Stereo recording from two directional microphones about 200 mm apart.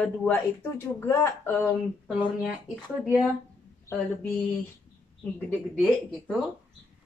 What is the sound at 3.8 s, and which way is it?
Speech, 10° left (ahead or behind).